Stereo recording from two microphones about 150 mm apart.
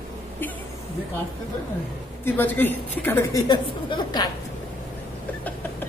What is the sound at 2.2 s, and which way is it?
A woman's voice, 10° left (ahead or behind).